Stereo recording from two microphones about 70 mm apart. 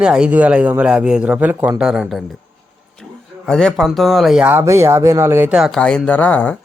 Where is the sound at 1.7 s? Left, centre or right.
Centre.